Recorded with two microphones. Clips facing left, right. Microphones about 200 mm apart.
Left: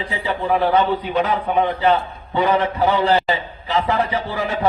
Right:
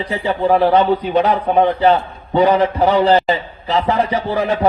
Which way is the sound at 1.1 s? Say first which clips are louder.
Right 4 dB; 40° right (ahead or behind).